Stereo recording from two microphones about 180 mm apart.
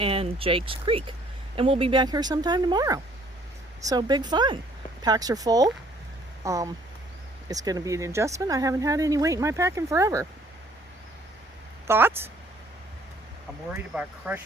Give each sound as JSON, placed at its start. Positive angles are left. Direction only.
{"t": 0.0, "sound": "a woman's voice", "side_deg": -30}
{"t": 11.9, "sound": "speech", "side_deg": -10}
{"t": 13.7, "sound": "speech", "side_deg": -10}